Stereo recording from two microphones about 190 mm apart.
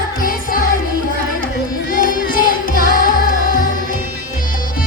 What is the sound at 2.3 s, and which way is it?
Music, 45° left (ahead or behind).